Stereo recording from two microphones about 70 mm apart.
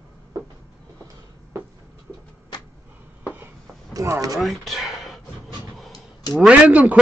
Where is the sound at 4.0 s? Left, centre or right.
Right.